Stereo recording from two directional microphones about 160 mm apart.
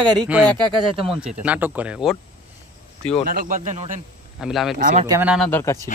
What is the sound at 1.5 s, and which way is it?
Speech, 10° right (ahead or behind).